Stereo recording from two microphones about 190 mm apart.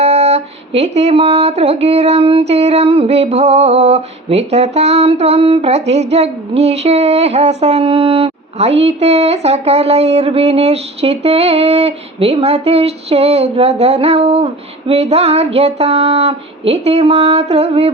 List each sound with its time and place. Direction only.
0.0 s speech: 35° right (ahead or behind)